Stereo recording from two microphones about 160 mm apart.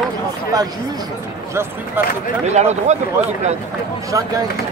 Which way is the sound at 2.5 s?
45° right (ahead or behind).